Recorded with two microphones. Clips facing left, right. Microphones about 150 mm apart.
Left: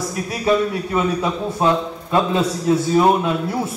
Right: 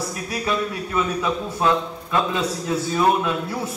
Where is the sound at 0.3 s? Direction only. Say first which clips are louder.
Left 7 dB; 25° left (ahead or behind).